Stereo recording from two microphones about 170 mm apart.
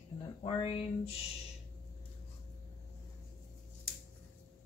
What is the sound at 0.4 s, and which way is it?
Speech, 35° left (ahead or behind).